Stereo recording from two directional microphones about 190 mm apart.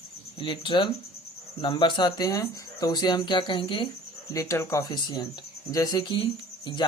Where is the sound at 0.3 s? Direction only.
25° left (ahead or behind).